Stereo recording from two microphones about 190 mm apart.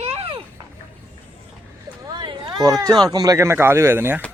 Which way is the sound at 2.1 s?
25° right (ahead or behind).